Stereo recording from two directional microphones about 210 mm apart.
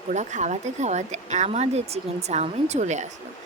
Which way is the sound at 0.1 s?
35° right (ahead or behind).